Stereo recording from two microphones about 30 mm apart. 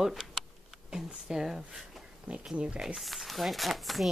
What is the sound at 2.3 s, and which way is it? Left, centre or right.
Speech, right.